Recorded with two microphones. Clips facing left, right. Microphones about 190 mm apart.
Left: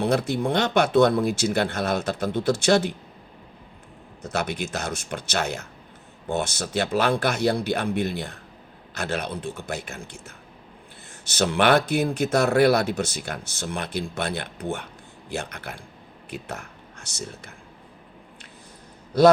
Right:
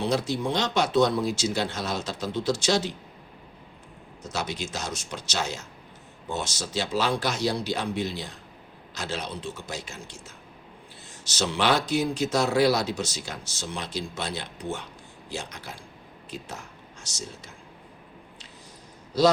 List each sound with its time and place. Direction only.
0.0 s speech: 55° left (ahead or behind)
4.2 s speech: 55° left (ahead or behind)
19.1 s speech: 55° left (ahead or behind)